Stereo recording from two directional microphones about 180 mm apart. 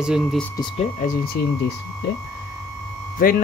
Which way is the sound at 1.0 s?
55° left (ahead or behind).